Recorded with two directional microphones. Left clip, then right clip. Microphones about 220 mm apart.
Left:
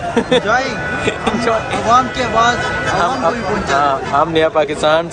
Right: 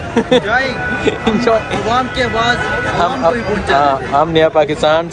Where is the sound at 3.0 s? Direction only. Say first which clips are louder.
Right 3 dB; 10° left (ahead or behind).